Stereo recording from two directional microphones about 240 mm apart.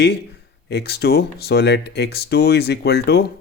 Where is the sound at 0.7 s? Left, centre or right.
Left.